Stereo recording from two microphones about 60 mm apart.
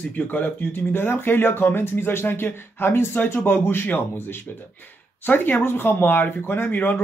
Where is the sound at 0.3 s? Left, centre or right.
Left.